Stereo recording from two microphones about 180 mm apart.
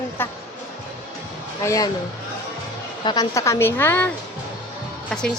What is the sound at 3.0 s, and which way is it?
A woman's voice, 20° left (ahead or behind).